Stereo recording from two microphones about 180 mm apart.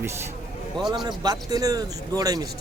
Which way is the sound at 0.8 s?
25° right (ahead or behind).